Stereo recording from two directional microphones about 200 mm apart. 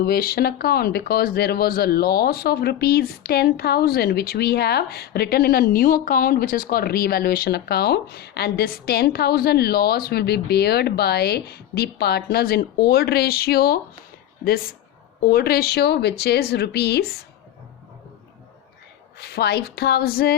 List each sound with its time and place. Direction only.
0.0 s speech: 50° left (ahead or behind)
19.2 s speech: 55° left (ahead or behind)